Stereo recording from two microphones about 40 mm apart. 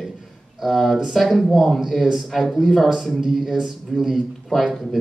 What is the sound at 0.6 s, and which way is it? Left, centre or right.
Speech, centre.